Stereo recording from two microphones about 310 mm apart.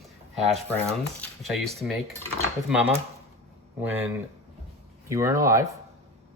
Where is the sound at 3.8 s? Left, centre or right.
Centre.